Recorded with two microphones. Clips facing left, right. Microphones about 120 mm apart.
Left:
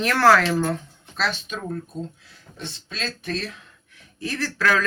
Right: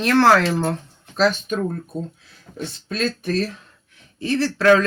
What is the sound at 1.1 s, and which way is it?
Speech, 45° right (ahead or behind).